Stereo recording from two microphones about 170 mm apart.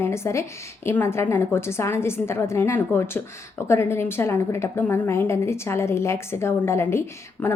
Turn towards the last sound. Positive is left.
turn(degrees=15)  # may be behind; listen again after turning